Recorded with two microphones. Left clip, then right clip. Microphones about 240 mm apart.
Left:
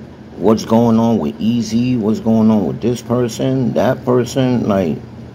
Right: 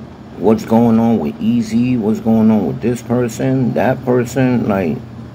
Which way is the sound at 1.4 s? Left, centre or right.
Left.